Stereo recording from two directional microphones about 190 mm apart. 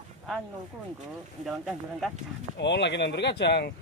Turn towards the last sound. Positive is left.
turn(degrees=60)  # may be behind; listen again after turning